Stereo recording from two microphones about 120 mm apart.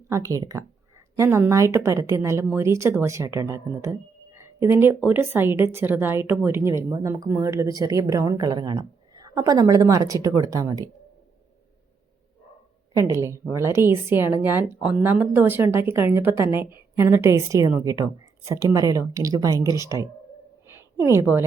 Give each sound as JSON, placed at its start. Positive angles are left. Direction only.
{"t": 0.1, "sound": "speech", "side_deg": -25}
{"t": 13.0, "sound": "a woman's voice", "side_deg": -25}